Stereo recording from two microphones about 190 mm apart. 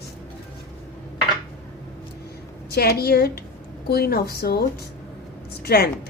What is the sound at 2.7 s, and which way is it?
Speech, 55° left (ahead or behind).